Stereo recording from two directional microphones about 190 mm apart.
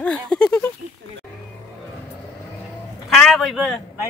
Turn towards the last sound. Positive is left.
turn(degrees=0)  # may be behind; listen again after turning